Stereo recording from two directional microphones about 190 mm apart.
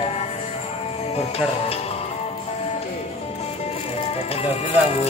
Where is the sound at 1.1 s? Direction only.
30° left (ahead or behind).